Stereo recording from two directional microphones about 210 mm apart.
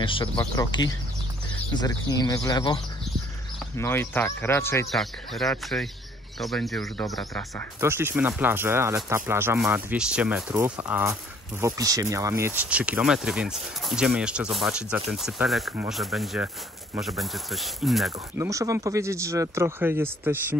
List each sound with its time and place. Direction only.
0.0 s speech: 25° left (ahead or behind)
4.8 s speech: centre (ahead or behind)
7.8 s speech: 10° right (ahead or behind)
18.4 s speech: 15° right (ahead or behind)